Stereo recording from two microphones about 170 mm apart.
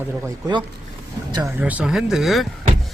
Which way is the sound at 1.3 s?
25° right (ahead or behind).